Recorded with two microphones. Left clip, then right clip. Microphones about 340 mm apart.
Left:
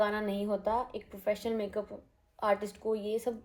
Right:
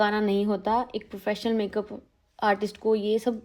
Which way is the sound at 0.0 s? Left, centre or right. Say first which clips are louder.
Right 7 dB; right.